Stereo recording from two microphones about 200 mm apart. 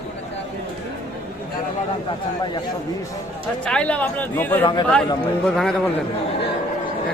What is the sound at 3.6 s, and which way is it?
A man's voice, 5° left (ahead or behind).